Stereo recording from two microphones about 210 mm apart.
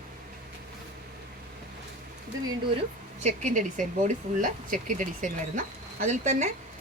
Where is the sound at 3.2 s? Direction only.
35° right (ahead or behind).